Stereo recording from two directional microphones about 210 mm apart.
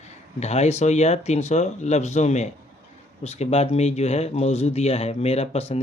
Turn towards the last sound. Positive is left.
turn(degrees=30)  # may be behind; listen again after turning